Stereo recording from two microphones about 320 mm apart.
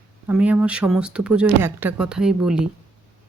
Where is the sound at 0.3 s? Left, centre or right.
Centre.